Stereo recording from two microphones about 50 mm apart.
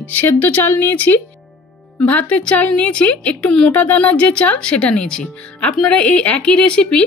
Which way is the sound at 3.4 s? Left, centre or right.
Centre.